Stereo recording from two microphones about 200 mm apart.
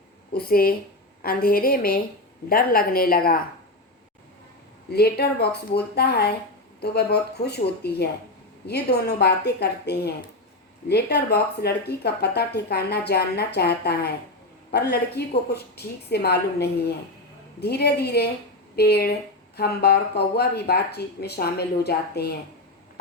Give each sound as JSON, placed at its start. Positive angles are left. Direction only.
{"t": 0.3, "sound": "speech", "side_deg": 50}
{"t": 4.9, "sound": "speech", "side_deg": 55}
{"t": 8.6, "sound": "speech", "side_deg": 55}